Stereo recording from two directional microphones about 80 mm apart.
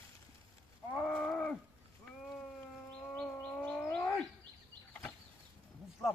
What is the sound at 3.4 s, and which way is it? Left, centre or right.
Bird, centre.